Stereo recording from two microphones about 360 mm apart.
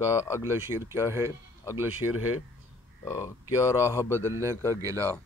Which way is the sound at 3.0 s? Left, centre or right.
Centre.